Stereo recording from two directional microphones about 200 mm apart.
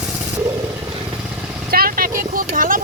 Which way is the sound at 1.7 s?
45° right (ahead or behind).